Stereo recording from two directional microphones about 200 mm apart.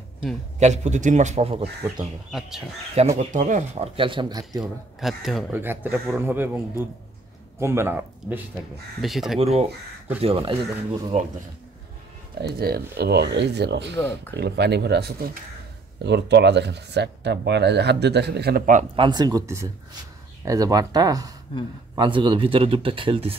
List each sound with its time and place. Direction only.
0.6 s a man's voice: 35° right (ahead or behind)
3.2 s a man's voice: 40° right (ahead or behind); by 4.5 s 20° right (ahead or behind)
4.5 s speech: centre (ahead or behind)
9.4 s a man's voice: 30° right (ahead or behind)
12.4 s speech: 50° right (ahead or behind)
18.9 s a man's voice: 20° right (ahead or behind)